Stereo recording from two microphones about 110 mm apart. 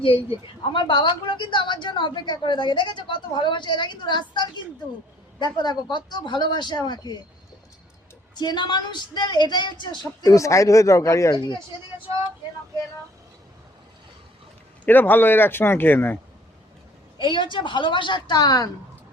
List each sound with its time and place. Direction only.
0.0 s a woman's voice: 55° left (ahead or behind); by 7.2 s 40° left (ahead or behind)
8.4 s a woman's voice: 40° left (ahead or behind)
10.2 s speech: 30° left (ahead or behind)
14.8 s speech: 15° left (ahead or behind)
17.2 s a woman's voice: 50° left (ahead or behind)